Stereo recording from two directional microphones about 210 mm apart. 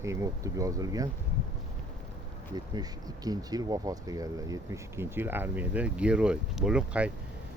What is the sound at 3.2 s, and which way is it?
Speech, 20° right (ahead or behind).